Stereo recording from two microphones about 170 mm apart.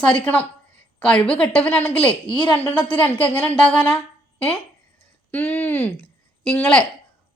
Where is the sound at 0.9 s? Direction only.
5° left (ahead or behind).